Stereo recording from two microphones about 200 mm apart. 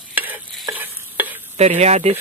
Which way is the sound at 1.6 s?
35° right (ahead or behind).